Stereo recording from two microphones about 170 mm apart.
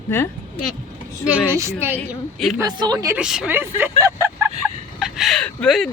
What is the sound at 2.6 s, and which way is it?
Speech, 25° right (ahead or behind).